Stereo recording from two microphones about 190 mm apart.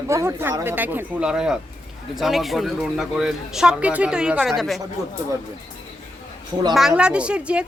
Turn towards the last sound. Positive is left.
turn(degrees=-5)  # may be behind; listen again after turning